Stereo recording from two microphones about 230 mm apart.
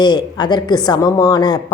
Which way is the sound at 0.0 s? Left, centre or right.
Centre.